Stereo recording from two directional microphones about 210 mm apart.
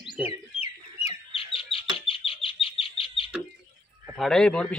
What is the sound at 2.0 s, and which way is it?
Chicken, 25° left (ahead or behind).